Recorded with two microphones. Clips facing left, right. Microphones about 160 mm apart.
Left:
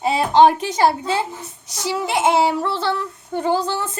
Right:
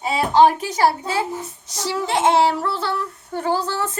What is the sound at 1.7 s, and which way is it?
A woman's voice, 10° left (ahead or behind).